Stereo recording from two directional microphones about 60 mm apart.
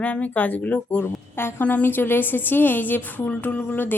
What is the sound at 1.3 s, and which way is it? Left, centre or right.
A woman's voice, left.